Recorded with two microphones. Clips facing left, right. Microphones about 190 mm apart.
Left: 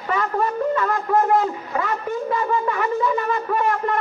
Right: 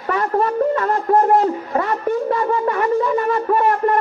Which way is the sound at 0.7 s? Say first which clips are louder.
Right 3 dB; 40° right (ahead or behind).